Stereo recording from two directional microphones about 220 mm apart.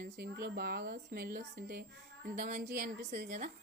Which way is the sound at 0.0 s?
45° right (ahead or behind).